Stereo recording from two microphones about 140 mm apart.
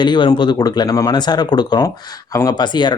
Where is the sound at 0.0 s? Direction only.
35° left (ahead or behind).